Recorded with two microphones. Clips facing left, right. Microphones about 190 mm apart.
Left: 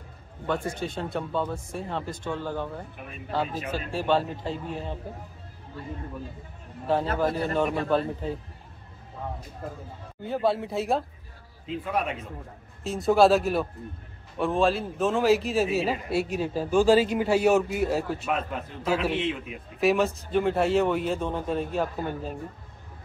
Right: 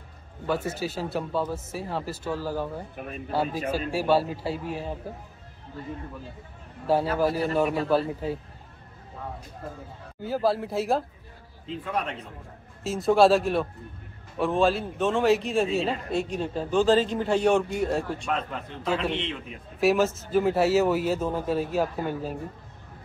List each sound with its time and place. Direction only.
0.5 s a man's voice: 5° right (ahead or behind)
7.2 s a man's voice: 10° right (ahead or behind)
10.2 s a man's voice: centre (ahead or behind)